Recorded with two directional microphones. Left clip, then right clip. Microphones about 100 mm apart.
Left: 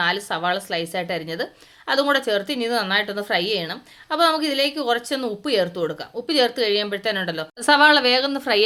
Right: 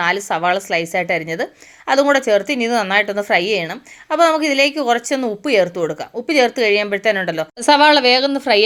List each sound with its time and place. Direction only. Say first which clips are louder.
0.0 s a woman's voice: right 5 dB; 65° right (ahead or behind); by 2.8 s 90° right
2.9 s a woman's voice: right 6 dB; 75° right (ahead or behind); by 8.6 s 50° right (ahead or behind)